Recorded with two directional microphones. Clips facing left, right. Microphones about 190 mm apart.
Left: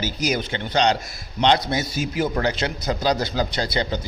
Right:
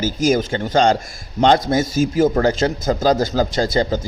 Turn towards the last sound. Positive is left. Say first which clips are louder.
# right 6 dB
turn(degrees=-45)  # may be behind; listen again after turning